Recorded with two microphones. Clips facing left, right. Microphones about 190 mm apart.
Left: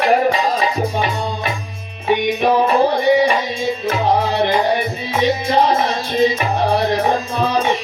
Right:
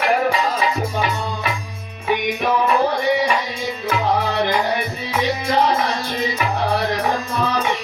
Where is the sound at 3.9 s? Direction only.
30° left (ahead or behind).